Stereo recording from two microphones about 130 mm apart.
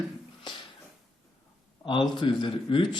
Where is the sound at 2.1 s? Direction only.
35° left (ahead or behind).